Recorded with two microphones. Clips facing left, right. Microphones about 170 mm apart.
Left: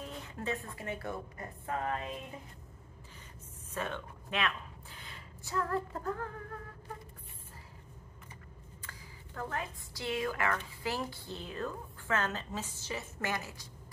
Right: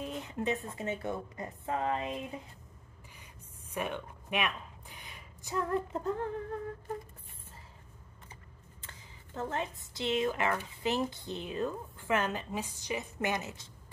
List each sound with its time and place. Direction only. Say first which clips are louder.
0.0 s speech: right 5 dB; 20° right (ahead or behind)
3.7 s a woman's voice: right 2 dB; 15° right (ahead or behind)
8.8 s speech: even; 25° right (ahead or behind)